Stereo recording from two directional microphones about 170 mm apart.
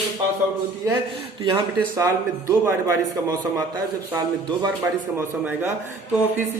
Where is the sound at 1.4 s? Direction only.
25° right (ahead or behind).